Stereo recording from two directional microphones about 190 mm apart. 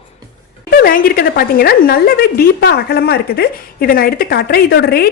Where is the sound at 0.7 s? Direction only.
50° left (ahead or behind).